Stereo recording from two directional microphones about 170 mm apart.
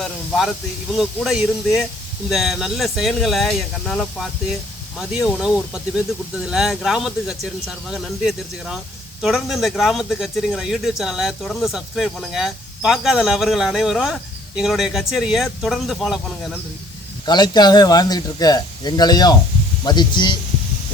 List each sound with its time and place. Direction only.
0.0 s speech: centre (ahead or behind)
17.2 s speech: 25° left (ahead or behind)